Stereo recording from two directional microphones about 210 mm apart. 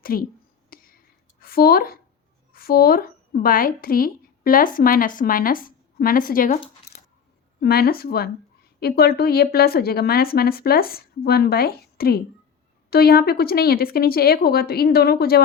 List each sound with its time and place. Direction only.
0.0 s speech: 45° left (ahead or behind)
0.7 s whispering: 45° left (ahead or behind)
1.4 s a woman's voice: 45° left (ahead or behind)
7.6 s speech: 45° left (ahead or behind)